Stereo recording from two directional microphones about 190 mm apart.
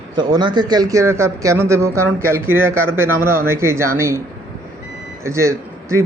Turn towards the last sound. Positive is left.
turn(degrees=-15)  # may be behind; listen again after turning